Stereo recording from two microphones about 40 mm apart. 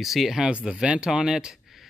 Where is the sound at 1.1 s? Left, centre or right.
Centre.